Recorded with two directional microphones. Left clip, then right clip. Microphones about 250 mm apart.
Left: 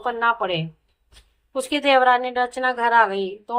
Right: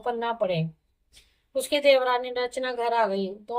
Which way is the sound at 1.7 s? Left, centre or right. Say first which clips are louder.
Left 4 dB; left.